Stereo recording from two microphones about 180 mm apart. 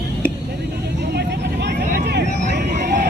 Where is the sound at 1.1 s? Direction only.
70° right (ahead or behind).